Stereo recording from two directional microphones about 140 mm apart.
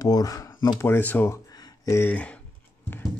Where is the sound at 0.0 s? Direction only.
25° left (ahead or behind).